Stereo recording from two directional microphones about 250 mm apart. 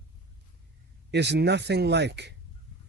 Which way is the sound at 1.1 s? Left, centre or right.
Right.